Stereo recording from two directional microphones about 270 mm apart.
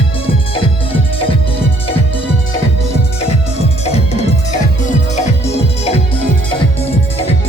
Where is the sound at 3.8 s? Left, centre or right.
Left.